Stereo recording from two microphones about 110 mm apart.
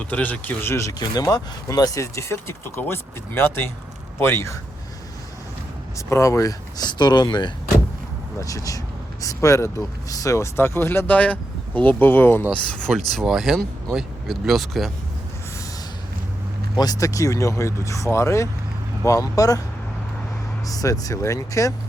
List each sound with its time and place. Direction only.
0.0 s speech: 15° left (ahead or behind)
6.1 s speech: 25° left (ahead or behind); by 7.5 s 45° left (ahead or behind)
8.4 s speech: 30° left (ahead or behind); by 14.9 s centre (ahead or behind)
16.7 s speech: 35° left (ahead or behind)
20.7 s speech: 35° left (ahead or behind)